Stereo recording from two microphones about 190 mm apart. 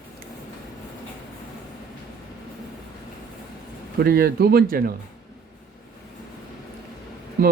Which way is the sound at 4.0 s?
55° right (ahead or behind).